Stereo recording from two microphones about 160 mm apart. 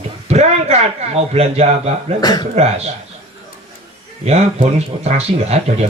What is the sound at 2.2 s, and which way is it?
Speech, 25° left (ahead or behind).